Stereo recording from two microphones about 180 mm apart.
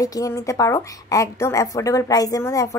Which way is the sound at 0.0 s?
20° left (ahead or behind).